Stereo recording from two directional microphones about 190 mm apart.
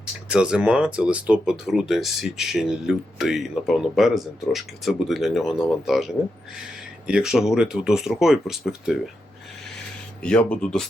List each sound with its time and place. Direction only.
0.3 s speech: 5° right (ahead or behind)
7.1 s speech: 5° right (ahead or behind)
10.2 s speech: 5° left (ahead or behind)